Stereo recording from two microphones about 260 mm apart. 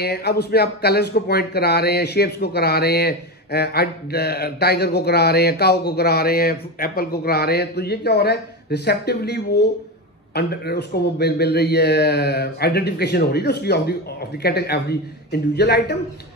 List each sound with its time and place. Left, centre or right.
0.0 s speech: left